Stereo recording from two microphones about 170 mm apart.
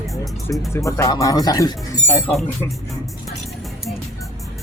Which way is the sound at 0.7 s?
15° left (ahead or behind).